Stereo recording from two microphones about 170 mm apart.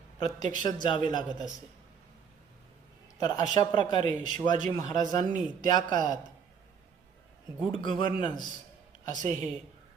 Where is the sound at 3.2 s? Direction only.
25° left (ahead or behind).